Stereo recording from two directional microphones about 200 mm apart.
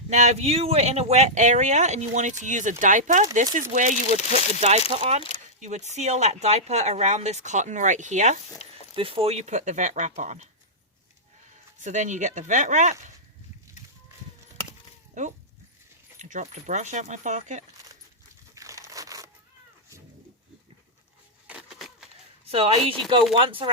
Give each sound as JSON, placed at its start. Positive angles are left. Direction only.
{"t": 0.1, "sound": "speech", "side_deg": -35}
{"t": 11.5, "sound": "speech", "side_deg": -35}
{"t": 15.2, "sound": "speech", "side_deg": -35}
{"t": 18.5, "sound": "a sound", "side_deg": -15}
{"t": 21.4, "sound": "a sound", "side_deg": 0}
{"t": 22.4, "sound": "a woman's voice", "side_deg": -30}